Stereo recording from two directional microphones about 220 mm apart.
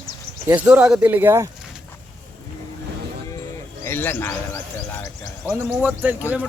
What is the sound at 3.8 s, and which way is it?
Speech, 10° left (ahead or behind).